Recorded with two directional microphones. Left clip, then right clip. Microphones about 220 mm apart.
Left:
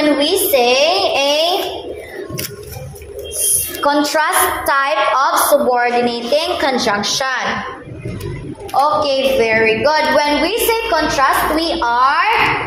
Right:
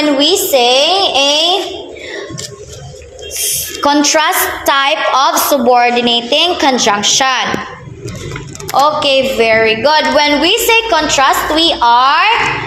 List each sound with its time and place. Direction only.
0.2 s a sound: 35° right (ahead or behind)
3.8 s a woman's voice: 45° right (ahead or behind)
8.7 s a woman's voice: 40° right (ahead or behind)